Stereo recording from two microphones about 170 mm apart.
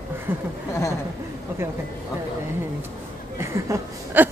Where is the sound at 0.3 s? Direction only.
10° right (ahead or behind).